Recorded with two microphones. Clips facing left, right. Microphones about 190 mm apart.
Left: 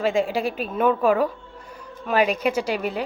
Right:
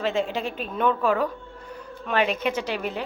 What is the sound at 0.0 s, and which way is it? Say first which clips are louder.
A woman's voice: left 4 dB; 10° left (ahead or behind).